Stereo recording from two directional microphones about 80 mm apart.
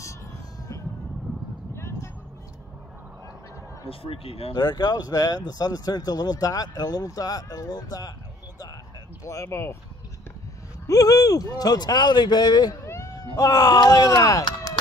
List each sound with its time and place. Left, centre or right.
1.8 s vehicle: left
4.6 s speech: left
9.2 s speech: left
10.9 s speech: left
12.8 s cat: left
13.1 s speech: left